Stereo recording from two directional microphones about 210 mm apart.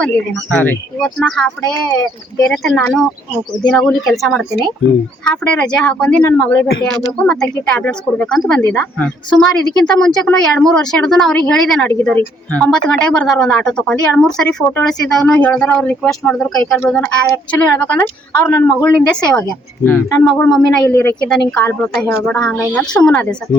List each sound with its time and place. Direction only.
0.5 s speech: 5° left (ahead or behind)